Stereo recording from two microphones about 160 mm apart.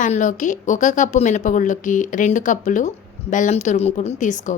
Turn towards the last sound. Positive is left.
turn(degrees=50)  # may be behind; listen again after turning